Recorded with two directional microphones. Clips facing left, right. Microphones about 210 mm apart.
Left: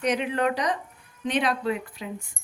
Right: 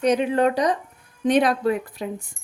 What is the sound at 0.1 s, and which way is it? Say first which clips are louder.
Speech: right 5 dB; 35° right (ahead or behind).